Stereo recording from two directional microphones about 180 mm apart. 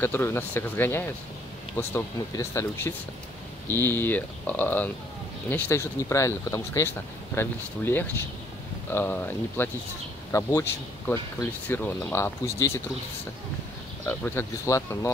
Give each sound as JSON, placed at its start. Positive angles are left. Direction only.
{"t": 0.0, "sound": "speech", "side_deg": 10}
{"t": 14.0, "sound": "speech", "side_deg": 10}